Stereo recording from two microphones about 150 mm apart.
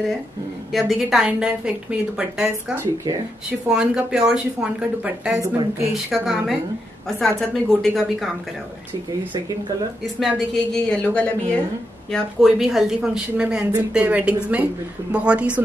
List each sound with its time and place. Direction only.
0.7 s speech: centre (ahead or behind)
2.7 s a woman's voice: 15° right (ahead or behind)
3.4 s a woman's voice: 5° right (ahead or behind)
10.2 s a woman's voice: centre (ahead or behind)